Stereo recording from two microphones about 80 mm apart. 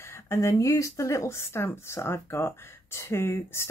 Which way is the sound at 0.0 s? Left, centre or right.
Left.